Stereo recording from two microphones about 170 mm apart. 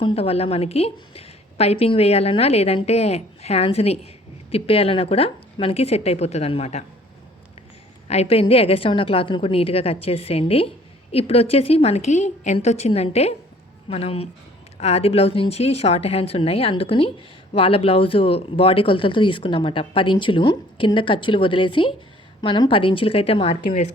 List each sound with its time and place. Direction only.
0.0 s speech: 35° left (ahead or behind)
8.0 s speech: 40° left (ahead or behind)